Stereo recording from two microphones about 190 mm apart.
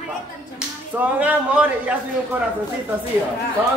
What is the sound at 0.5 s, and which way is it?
Speech, 5° right (ahead or behind).